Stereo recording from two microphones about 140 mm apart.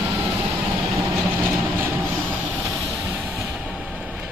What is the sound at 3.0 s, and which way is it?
Music, 10° right (ahead or behind).